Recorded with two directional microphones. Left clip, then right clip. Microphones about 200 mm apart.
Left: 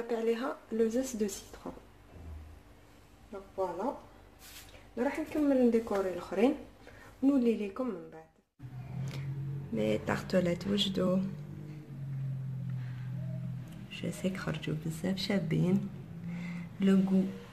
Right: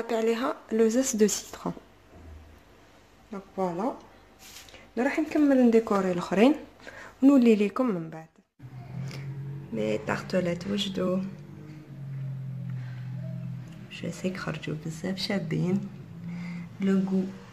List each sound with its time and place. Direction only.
0.0 s speech: 50° right (ahead or behind)
4.9 s speech: 55° right (ahead or behind)
9.8 s speech: centre (ahead or behind)
13.8 s speech: centre (ahead or behind)
16.3 s a sound: 5° left (ahead or behind)